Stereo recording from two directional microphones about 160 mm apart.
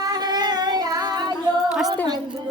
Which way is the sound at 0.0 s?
25° right (ahead or behind).